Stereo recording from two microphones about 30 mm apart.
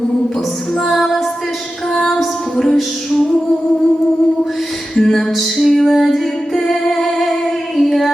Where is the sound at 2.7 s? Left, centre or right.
Centre.